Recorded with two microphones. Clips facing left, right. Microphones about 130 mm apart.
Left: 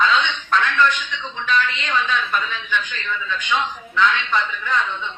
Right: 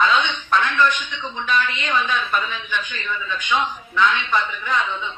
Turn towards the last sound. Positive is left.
turn(degrees=-10)  # may be behind; listen again after turning